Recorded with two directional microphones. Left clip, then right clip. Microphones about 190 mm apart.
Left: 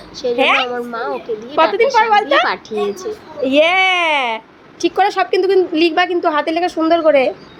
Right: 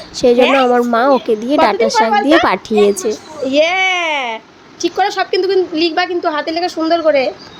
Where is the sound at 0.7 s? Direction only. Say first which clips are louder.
Right 10 dB; 40° right (ahead or behind).